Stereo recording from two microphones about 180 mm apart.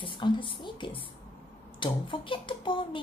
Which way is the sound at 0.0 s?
30° left (ahead or behind).